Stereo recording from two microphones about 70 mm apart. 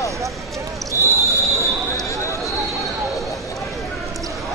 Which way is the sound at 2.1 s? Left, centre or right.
Left.